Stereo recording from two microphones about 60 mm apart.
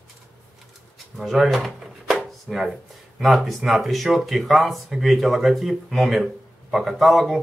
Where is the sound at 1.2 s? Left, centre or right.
Centre.